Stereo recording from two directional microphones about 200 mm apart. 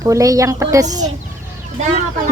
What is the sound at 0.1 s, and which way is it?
Speech, 15° right (ahead or behind).